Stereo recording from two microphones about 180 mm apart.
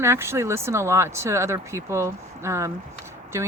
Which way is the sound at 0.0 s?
15° right (ahead or behind).